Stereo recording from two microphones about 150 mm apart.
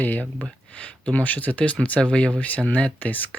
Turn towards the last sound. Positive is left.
turn(degrees=10)  # may be behind; listen again after turning